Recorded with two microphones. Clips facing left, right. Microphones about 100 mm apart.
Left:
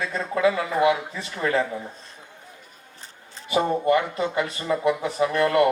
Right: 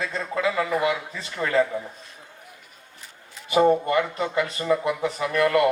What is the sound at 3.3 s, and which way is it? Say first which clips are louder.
A man's voice: right 4 dB; 30° left (ahead or behind).